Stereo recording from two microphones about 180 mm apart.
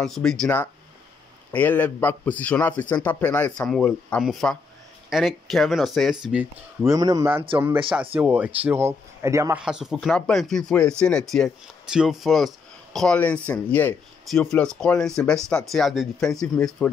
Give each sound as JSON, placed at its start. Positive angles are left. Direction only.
{"t": 0.0, "sound": "a man's voice", "side_deg": 5}
{"t": 6.9, "sound": "a man's voice", "side_deg": -20}
{"t": 9.6, "sound": "speech", "side_deg": -5}